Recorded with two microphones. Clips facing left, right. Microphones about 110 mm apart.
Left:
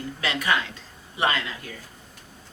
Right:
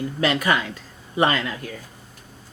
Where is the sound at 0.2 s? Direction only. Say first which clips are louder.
Right 4 dB; 45° right (ahead or behind).